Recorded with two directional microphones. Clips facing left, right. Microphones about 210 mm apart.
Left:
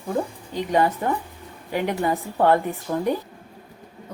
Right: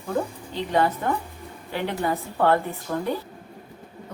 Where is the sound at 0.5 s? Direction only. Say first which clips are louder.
Left 2 dB; 15° left (ahead or behind).